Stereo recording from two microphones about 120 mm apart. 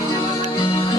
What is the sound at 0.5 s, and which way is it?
Music, 45° left (ahead or behind).